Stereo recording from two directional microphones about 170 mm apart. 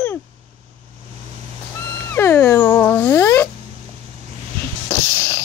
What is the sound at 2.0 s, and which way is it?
Speech, 15° left (ahead or behind).